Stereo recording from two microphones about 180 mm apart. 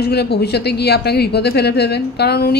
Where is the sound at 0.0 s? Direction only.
65° left (ahead or behind).